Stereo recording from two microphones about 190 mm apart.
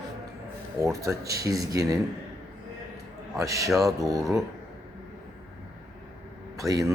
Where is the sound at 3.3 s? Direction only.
15° right (ahead or behind).